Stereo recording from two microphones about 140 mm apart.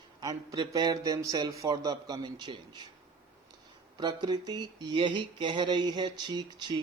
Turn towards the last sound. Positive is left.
turn(degrees=-30)  # may be behind; listen again after turning